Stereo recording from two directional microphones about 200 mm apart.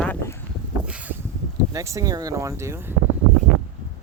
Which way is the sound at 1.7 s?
15° right (ahead or behind).